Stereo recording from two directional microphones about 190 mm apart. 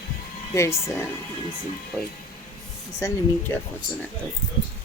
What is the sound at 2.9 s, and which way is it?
Speech, 15° left (ahead or behind).